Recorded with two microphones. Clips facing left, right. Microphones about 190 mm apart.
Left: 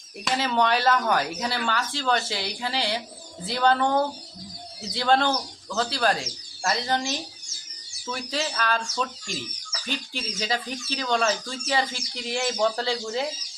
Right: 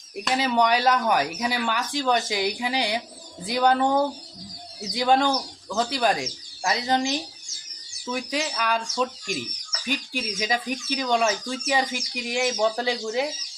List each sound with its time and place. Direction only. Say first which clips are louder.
0.3 s speech: right 2 dB; 10° right (ahead or behind)